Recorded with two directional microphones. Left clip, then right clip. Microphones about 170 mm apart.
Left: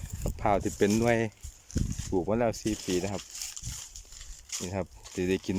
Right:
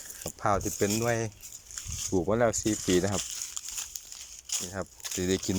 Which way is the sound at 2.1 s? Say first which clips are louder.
Right 2 dB; 10° left (ahead or behind).